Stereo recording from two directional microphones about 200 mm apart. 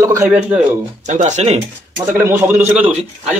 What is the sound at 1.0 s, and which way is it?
Speech, 35° right (ahead or behind).